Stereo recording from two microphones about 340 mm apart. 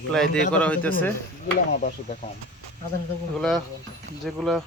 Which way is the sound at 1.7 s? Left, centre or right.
Left.